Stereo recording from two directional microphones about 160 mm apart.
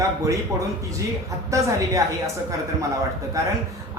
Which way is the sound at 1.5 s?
20° right (ahead or behind).